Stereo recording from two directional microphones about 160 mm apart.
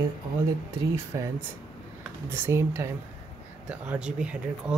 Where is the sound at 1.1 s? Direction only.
20° right (ahead or behind).